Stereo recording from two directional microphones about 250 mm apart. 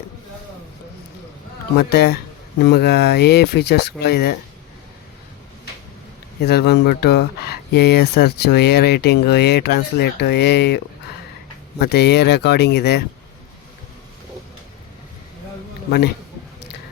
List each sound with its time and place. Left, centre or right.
1.7 s speech: left
6.4 s speech: left
11.8 s speech: left
15.9 s speech: left